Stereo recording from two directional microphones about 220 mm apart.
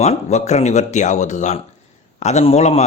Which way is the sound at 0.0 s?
30° left (ahead or behind).